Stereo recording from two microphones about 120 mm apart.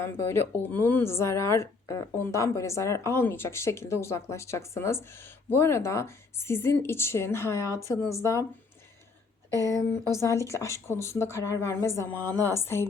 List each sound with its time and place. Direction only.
0.0 s speech: 20° left (ahead or behind)
9.5 s speech: 30° right (ahead or behind)
9.7 s speech: 20° left (ahead or behind)